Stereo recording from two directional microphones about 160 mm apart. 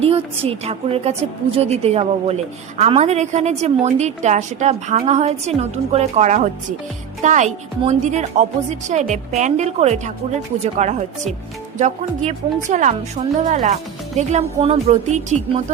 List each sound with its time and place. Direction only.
0.0 s a woman's voice: 40° right (ahead or behind)